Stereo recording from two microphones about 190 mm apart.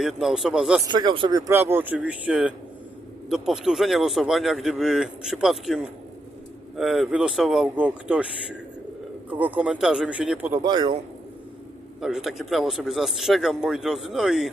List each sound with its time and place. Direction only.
0.0 s speech: centre (ahead or behind)
0.9 s speech: 20° right (ahead or behind); by 8.3 s 5° right (ahead or behind)
9.3 s speech: 10° right (ahead or behind)
10.6 s a man's voice: 25° right (ahead or behind)
11.9 s speech: centre (ahead or behind)